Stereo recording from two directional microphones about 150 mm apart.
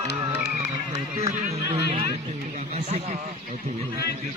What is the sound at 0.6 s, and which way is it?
Run, 20° right (ahead or behind).